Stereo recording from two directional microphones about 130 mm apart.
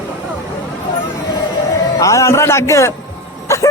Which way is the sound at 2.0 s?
25° left (ahead or behind).